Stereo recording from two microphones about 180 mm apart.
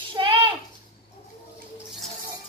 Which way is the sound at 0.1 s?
25° right (ahead or behind).